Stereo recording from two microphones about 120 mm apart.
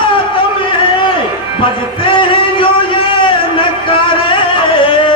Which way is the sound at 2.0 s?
45° left (ahead or behind).